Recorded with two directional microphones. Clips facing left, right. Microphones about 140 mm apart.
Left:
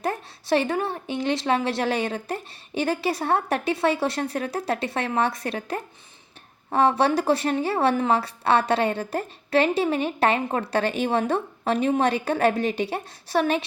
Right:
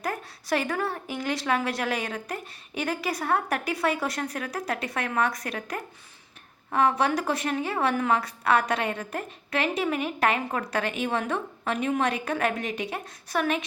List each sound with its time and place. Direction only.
0.0 s a woman's voice: 30° left (ahead or behind)